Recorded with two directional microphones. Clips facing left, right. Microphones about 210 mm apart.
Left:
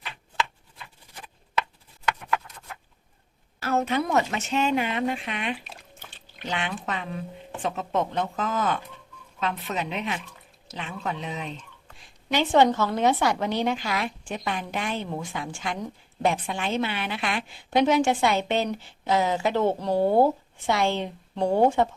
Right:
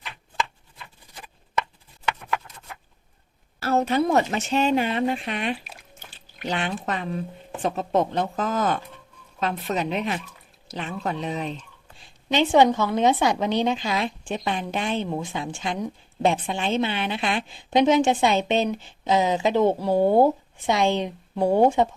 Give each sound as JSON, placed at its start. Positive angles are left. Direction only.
{"t": 3.6, "sound": "speech", "side_deg": -35}
{"t": 12.3, "sound": "a woman's voice", "side_deg": -15}